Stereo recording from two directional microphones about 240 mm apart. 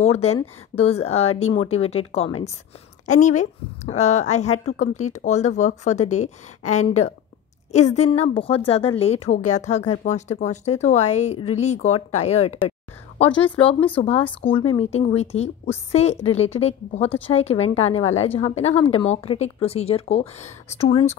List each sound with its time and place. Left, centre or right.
0.0 s a woman's voice: left